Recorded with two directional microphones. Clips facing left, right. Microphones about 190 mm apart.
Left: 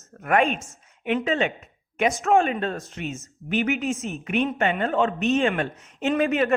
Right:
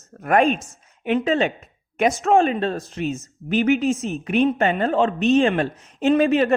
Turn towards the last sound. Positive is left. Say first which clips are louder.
# right 5 dB
turn(degrees=-30)  # may be behind; listen again after turning